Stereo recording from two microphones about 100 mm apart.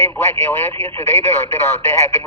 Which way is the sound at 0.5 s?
25° left (ahead or behind).